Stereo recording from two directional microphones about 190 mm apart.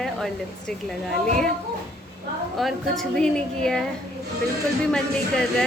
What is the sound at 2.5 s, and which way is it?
A woman's voice, centre (ahead or behind).